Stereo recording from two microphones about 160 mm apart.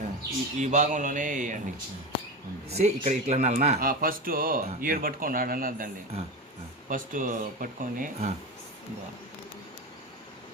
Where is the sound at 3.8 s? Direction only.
65° right (ahead or behind).